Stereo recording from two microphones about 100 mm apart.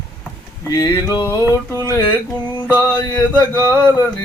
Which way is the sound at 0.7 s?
40° left (ahead or behind).